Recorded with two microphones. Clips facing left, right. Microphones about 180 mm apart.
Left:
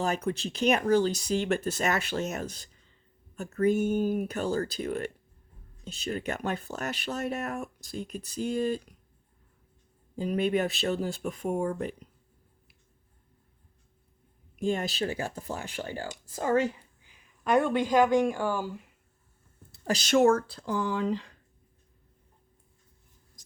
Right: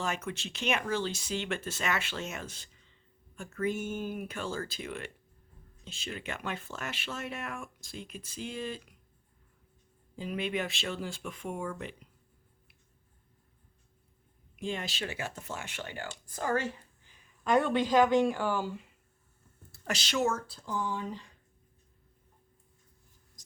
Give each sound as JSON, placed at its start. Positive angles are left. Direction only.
{"t": 0.0, "sound": "speech", "side_deg": 35}
{"t": 10.2, "sound": "speech", "side_deg": 40}
{"t": 14.6, "sound": "speech", "side_deg": 45}
{"t": 16.3, "sound": "speech", "side_deg": 25}
{"t": 17.8, "sound": "speech", "side_deg": 15}
{"t": 19.7, "sound": "a sound", "side_deg": 30}
{"t": 20.0, "sound": "speech", "side_deg": 50}